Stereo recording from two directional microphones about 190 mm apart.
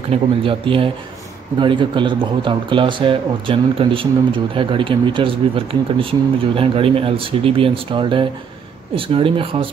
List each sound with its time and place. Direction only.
0.1 s speech: 30° right (ahead or behind)